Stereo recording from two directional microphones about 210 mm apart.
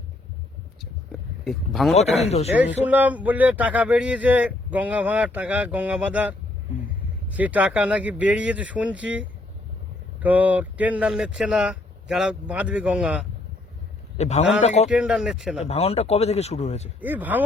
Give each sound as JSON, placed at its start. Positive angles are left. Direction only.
{"t": 1.5, "sound": "speech", "side_deg": 0}
{"t": 2.0, "sound": "speech", "side_deg": 30}
{"t": 2.8, "sound": "speech", "side_deg": -10}
{"t": 14.2, "sound": "speech", "side_deg": 30}
{"t": 14.8, "sound": "speech", "side_deg": -5}
{"t": 15.5, "sound": "speech", "side_deg": 30}
{"t": 17.0, "sound": "speech", "side_deg": -10}